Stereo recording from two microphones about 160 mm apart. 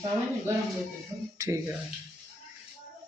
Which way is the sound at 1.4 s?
15° right (ahead or behind).